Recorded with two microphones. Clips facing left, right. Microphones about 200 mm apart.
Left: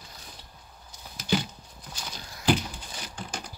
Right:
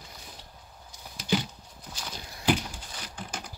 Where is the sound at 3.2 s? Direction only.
5° right (ahead or behind).